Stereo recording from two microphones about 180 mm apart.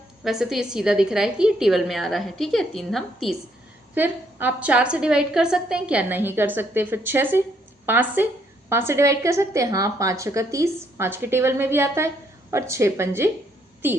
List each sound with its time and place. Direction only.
0.3 s a woman's voice: centre (ahead or behind)
3.9 s a woman's voice: 10° right (ahead or behind)